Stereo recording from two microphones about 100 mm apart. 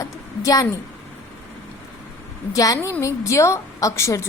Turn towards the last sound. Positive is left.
turn(degrees=30)  # may be behind; listen again after turning